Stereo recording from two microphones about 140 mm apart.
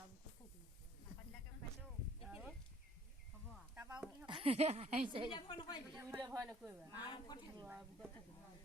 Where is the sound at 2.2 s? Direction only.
5° right (ahead or behind).